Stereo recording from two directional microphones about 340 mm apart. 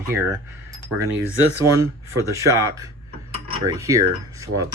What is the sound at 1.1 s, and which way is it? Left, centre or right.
Speech, right.